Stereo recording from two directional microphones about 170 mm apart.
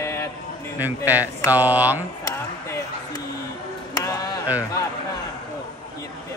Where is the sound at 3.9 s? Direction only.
20° left (ahead or behind).